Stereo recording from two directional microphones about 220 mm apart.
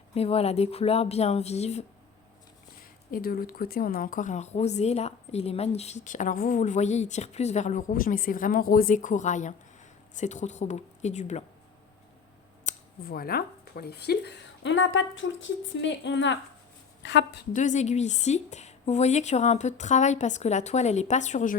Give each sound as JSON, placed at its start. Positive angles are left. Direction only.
{"t": 0.1, "sound": "a woman's voice", "side_deg": 25}
{"t": 3.1, "sound": "speech", "side_deg": 40}
{"t": 12.6, "sound": "scissors", "side_deg": 45}
{"t": 14.1, "sound": "a woman's voice", "side_deg": 55}
{"t": 17.5, "sound": "speech", "side_deg": 35}